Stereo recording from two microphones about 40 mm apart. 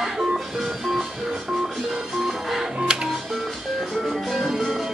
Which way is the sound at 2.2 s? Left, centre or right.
Centre.